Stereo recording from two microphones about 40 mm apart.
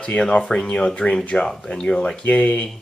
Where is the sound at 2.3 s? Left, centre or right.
Left.